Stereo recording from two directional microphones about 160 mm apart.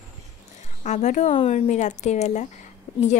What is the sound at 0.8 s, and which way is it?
A woman's voice, 50° left (ahead or behind).